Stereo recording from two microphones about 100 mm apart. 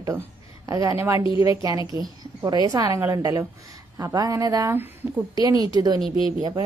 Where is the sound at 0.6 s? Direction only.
35° right (ahead or behind).